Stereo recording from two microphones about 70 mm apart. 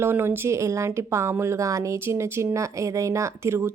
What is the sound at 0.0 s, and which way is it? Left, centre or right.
A woman's voice, right.